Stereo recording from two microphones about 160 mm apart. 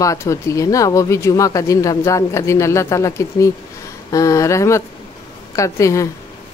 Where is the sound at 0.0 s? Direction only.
20° left (ahead or behind).